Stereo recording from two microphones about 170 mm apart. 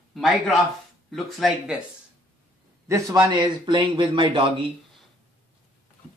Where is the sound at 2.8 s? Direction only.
15° right (ahead or behind).